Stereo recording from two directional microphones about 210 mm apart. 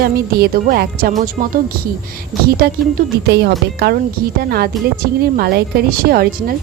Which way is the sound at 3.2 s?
50° right (ahead or behind).